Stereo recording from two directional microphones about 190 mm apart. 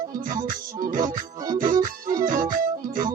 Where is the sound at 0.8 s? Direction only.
45° right (ahead or behind).